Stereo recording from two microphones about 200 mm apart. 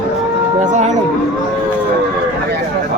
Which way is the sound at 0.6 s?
35° right (ahead or behind).